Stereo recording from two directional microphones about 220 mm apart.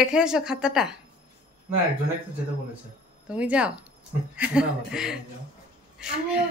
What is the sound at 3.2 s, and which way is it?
A man's voice, 5° right (ahead or behind).